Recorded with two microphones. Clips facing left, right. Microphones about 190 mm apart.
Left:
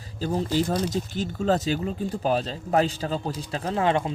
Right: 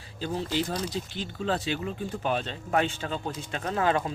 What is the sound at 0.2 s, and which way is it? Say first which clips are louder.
Speech: left 5 dB; 40° left (ahead or behind).